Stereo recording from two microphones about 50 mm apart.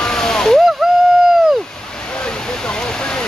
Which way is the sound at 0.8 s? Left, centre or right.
Centre.